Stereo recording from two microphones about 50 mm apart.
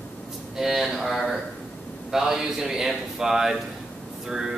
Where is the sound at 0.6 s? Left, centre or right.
Centre.